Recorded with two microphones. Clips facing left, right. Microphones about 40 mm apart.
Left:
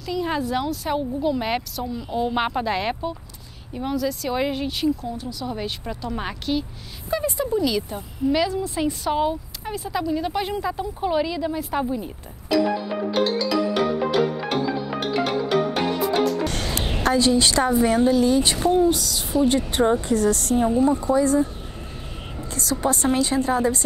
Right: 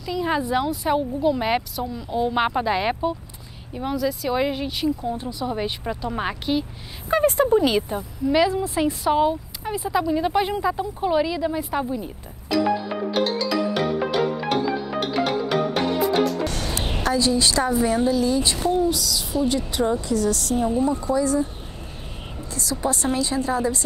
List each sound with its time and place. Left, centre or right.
0.0 s a woman's voice: centre
5.1 s speech: right
5.5 s a woman's voice: centre
7.1 s speech: right
7.9 s a woman's voice: centre
13.1 s music: centre
16.4 s music: left
17.0 s speech: left
22.4 s a woman's voice: left